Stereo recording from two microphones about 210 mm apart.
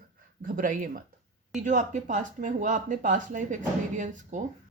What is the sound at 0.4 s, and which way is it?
Speech, 40° right (ahead or behind).